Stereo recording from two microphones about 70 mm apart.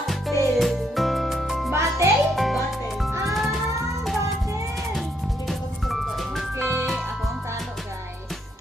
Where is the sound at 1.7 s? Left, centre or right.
Right.